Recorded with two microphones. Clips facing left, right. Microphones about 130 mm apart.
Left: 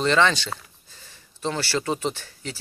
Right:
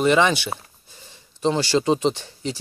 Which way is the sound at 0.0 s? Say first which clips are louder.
Right 3 dB; 10° right (ahead or behind).